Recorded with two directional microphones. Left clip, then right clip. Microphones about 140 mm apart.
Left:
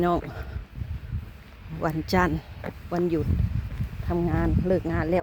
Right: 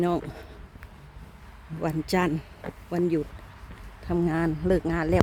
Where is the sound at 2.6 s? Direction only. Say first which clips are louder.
Left 5 dB; 90° left.